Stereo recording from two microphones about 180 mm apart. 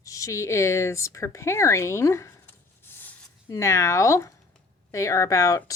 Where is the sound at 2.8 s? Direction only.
10° left (ahead or behind).